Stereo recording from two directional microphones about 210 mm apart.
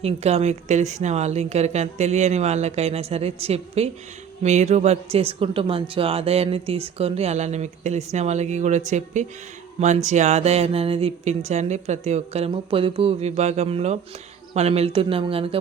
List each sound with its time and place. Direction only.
0.0 s speech: 30° right (ahead or behind)